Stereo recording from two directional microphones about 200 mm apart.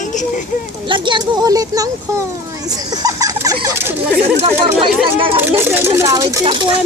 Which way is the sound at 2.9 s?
15° right (ahead or behind).